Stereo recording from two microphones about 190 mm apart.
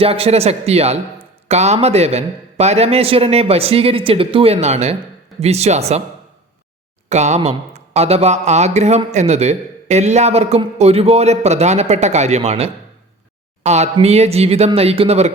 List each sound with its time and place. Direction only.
0.0 s a man's voice: 30° right (ahead or behind)
7.1 s a man's voice: 35° right (ahead or behind)